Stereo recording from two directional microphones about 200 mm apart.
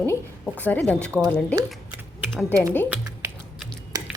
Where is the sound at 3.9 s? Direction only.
20° right (ahead or behind).